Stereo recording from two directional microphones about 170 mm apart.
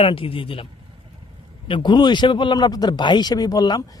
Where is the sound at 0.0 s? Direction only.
30° left (ahead or behind).